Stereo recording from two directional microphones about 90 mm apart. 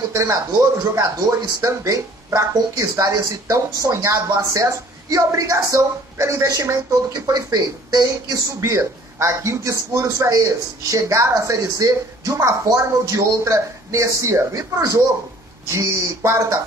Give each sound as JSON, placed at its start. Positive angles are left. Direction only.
{"t": 0.1, "sound": "speech", "side_deg": -35}
{"t": 1.6, "sound": "speech", "side_deg": -35}